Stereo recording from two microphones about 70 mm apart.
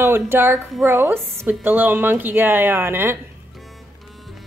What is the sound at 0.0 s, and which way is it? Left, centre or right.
A woman's voice, right.